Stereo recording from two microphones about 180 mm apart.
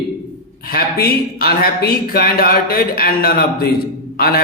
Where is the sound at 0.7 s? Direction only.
60° left (ahead or behind).